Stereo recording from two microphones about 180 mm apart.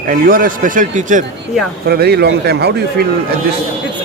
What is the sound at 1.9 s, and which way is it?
A man's voice, 60° right (ahead or behind).